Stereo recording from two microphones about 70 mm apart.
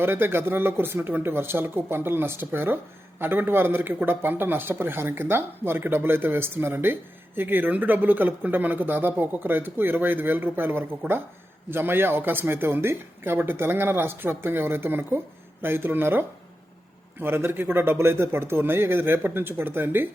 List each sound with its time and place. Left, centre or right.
0.0 s a man's voice: right